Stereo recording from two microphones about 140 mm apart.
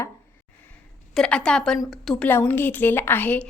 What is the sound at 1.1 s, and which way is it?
A woman's voice, 5° left (ahead or behind).